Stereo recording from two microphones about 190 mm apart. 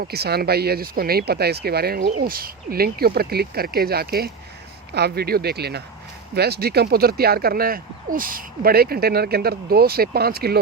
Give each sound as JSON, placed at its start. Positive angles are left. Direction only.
{"t": 0.0, "sound": "speech", "side_deg": -55}